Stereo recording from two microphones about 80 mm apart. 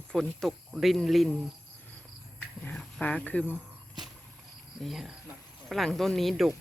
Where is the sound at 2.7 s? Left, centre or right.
Centre.